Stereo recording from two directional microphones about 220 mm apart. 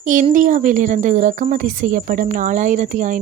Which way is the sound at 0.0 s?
35° right (ahead or behind).